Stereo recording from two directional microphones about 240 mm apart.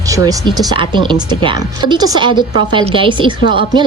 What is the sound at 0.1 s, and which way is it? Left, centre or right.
A woman's voice, centre.